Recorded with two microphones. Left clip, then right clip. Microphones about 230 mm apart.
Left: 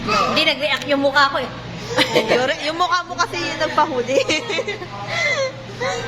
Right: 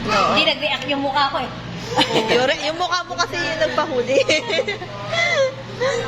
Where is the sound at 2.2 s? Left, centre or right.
Centre.